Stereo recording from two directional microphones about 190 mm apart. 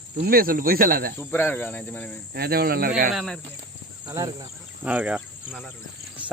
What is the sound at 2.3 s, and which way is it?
Speech, 55° right (ahead or behind).